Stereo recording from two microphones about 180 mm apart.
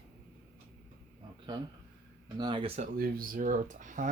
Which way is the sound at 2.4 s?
25° right (ahead or behind).